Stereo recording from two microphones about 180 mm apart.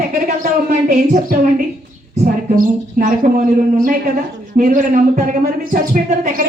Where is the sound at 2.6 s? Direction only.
50° right (ahead or behind).